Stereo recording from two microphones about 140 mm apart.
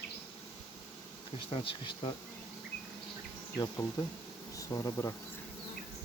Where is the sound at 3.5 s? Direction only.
25° left (ahead or behind).